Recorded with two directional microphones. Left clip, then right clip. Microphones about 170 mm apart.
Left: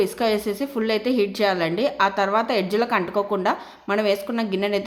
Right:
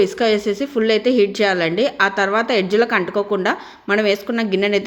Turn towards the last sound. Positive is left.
turn(degrees=-20)  # may be behind; listen again after turning